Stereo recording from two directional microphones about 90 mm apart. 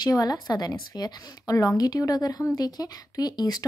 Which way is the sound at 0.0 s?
45° left (ahead or behind).